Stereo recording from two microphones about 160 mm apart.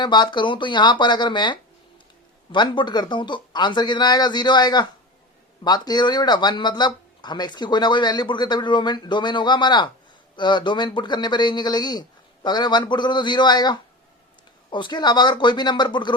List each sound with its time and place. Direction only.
0.0 s speech: 30° left (ahead or behind)